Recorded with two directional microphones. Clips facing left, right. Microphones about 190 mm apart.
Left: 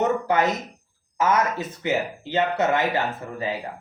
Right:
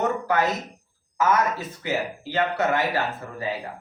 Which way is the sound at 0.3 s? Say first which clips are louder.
Left 2 dB; 20° left (ahead or behind).